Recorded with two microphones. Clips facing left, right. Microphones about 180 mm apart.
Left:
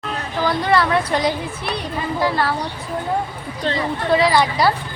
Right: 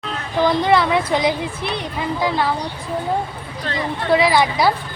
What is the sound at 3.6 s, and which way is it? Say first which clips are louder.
Speech: left 4 dB; 25° left (ahead or behind).